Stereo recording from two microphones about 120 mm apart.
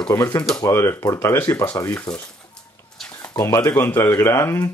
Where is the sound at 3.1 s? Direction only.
25° left (ahead or behind).